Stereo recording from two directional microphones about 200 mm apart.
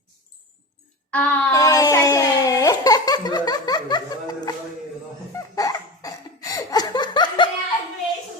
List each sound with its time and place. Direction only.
1.1 s crying: 10° left (ahead or behind)
5.3 s laughter: 15° left (ahead or behind)